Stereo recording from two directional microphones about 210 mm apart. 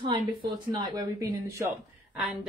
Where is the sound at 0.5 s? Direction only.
20° right (ahead or behind).